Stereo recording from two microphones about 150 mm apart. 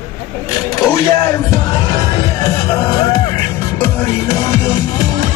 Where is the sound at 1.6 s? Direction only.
25° left (ahead or behind).